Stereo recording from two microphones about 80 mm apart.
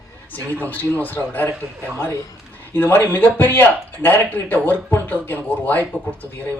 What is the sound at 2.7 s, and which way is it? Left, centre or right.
Speech, left.